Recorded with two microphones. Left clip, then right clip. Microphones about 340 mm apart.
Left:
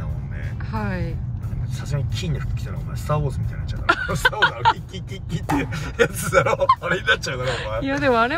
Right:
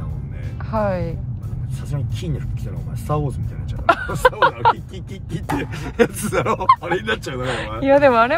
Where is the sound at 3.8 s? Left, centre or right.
Centre.